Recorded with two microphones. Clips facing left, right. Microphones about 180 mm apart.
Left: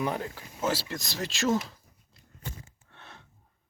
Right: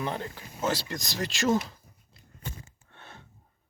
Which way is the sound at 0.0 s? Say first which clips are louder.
Left 2 dB; 5° left (ahead or behind).